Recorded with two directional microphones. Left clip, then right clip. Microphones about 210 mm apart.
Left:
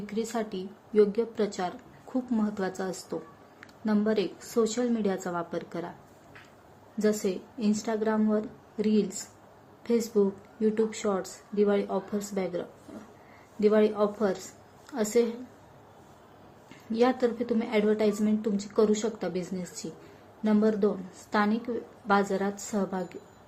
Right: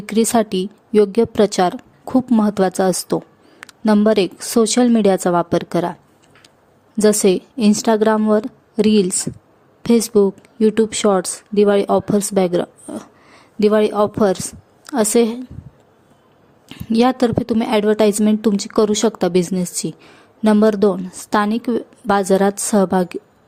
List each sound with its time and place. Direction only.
0.0 s a woman's voice: 55° right (ahead or behind)
7.0 s a woman's voice: 50° right (ahead or behind)
16.6 s a woman's voice: 55° right (ahead or behind)